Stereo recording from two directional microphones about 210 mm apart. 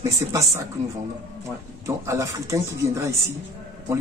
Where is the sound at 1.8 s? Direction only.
15° right (ahead or behind).